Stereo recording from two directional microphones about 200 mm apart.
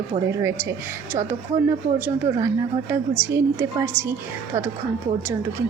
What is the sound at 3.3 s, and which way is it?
Speech, 15° right (ahead or behind).